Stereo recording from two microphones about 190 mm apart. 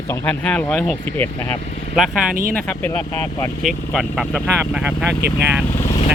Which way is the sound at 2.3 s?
50° right (ahead or behind).